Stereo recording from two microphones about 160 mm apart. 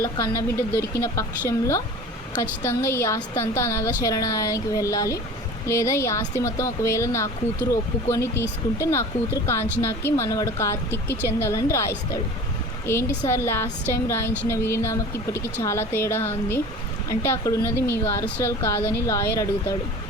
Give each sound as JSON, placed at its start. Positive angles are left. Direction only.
{"t": 0.0, "sound": "a woman's voice", "side_deg": 20}